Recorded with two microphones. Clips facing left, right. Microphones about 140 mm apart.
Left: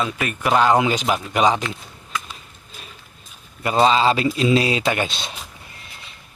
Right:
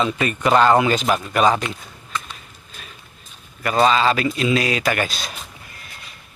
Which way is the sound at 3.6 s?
25° left (ahead or behind).